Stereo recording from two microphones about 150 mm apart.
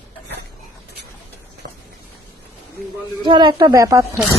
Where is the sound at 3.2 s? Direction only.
30° right (ahead or behind).